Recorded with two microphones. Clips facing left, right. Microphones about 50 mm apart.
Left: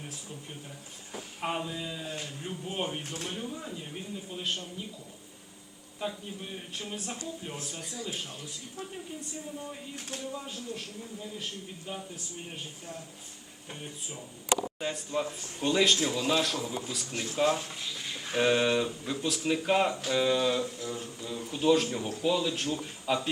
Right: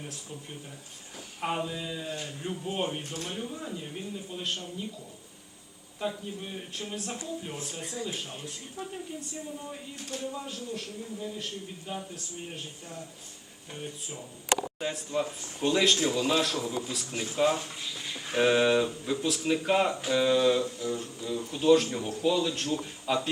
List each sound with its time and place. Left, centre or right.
0.0 s speech: centre
1.4 s speech: centre
3.0 s speech: left
3.2 s speech: centre
6.0 s speech: centre
10.2 s speech: centre